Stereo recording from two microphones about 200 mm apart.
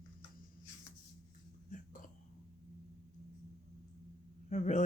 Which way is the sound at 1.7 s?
40° left (ahead or behind).